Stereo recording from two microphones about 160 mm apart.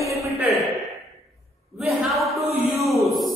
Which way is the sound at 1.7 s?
Centre (ahead or behind).